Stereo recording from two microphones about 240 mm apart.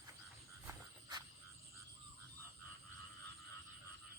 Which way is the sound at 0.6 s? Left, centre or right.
Centre.